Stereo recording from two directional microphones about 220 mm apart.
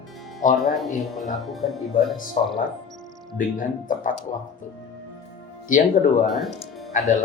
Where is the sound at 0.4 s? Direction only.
35° left (ahead or behind).